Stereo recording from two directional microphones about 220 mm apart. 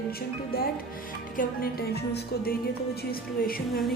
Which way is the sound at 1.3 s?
45° left (ahead or behind).